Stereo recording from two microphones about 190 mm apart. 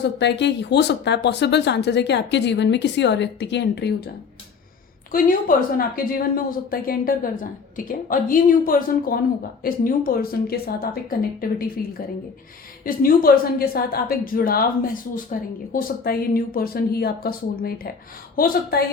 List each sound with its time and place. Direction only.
0.0 s speech: 65° left (ahead or behind)
5.1 s a woman's voice: 50° left (ahead or behind)